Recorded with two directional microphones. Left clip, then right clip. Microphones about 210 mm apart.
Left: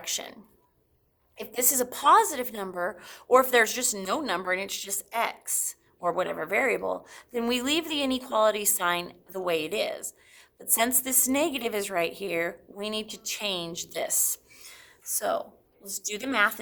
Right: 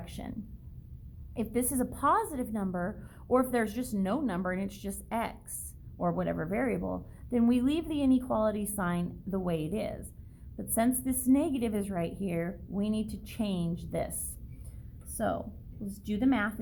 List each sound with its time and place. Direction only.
0.0 s a woman's voice: 25° left (ahead or behind)
1.5 s a woman's voice: 25° left (ahead or behind)
15.9 s a woman's voice: 35° left (ahead or behind)